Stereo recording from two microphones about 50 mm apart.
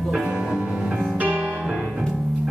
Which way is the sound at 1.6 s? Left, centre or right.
Centre.